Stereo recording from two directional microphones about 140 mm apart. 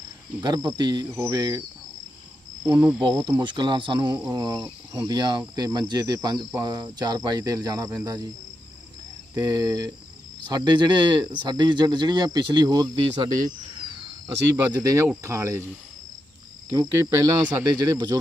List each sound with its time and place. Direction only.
0.4 s speech: 30° right (ahead or behind)
2.7 s speech: 10° right (ahead or behind)
3.0 s speech: 30° right (ahead or behind)
9.3 s speech: 25° right (ahead or behind)
14.5 s speech: 25° right (ahead or behind)
16.9 s speech: 20° right (ahead or behind)